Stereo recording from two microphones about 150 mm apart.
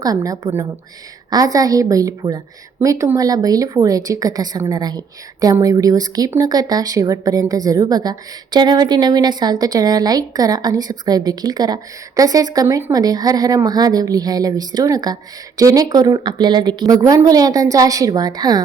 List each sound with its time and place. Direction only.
0.0 s speech: 25° right (ahead or behind)